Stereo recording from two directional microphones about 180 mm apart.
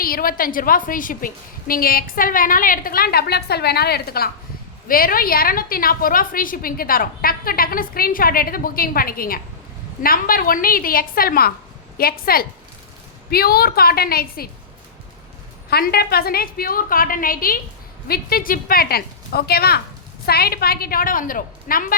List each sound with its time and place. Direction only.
0.0 s a woman's voice: 55° left (ahead or behind)
15.7 s a woman's voice: 60° left (ahead or behind)